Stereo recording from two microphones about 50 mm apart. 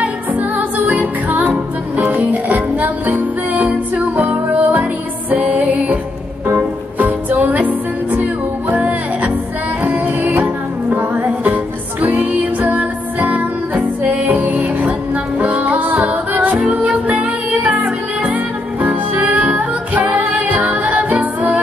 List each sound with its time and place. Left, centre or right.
0.0 s music: right